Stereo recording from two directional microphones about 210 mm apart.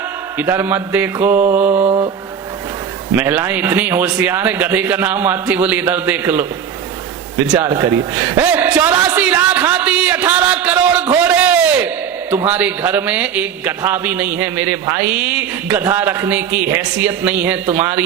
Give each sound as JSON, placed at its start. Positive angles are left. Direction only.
{"t": 0.3, "sound": "a man's voice", "side_deg": -10}
{"t": 1.8, "sound": "mantra", "side_deg": -25}
{"t": 3.2, "sound": "a man's voice", "side_deg": -10}
{"t": 7.4, "sound": "a man's voice", "side_deg": -5}
{"t": 7.7, "sound": "a sound", "side_deg": -15}
{"t": 12.3, "sound": "a man's voice", "side_deg": -10}